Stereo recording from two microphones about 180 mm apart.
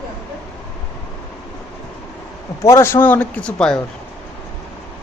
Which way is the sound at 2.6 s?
15° left (ahead or behind).